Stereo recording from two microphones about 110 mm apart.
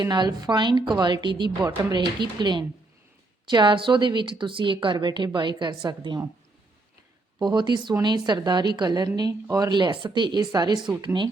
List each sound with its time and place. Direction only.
0.0 s a woman's voice: 40° right (ahead or behind)
7.3 s a woman's voice: 40° right (ahead or behind)